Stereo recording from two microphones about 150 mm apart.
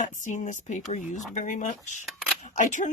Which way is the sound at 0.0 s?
55° left (ahead or behind).